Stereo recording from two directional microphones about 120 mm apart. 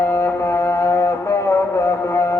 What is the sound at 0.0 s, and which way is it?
Music, 20° left (ahead or behind).